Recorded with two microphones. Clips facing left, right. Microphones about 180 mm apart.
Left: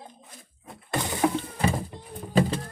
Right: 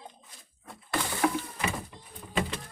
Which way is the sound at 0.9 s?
20° left (ahead or behind).